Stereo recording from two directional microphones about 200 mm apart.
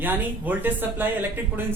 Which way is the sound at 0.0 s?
10° right (ahead or behind).